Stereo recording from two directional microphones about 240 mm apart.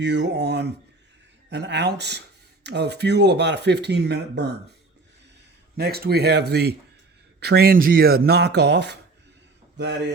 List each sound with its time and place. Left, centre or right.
0.0 s speech: right
5.7 s speech: right